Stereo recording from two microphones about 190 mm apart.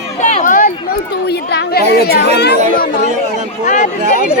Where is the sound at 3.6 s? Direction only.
40° left (ahead or behind).